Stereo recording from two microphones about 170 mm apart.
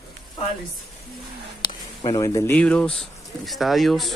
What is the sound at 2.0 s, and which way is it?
Speech, 20° left (ahead or behind).